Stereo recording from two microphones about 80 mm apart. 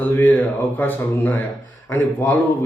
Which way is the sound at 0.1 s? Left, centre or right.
Left.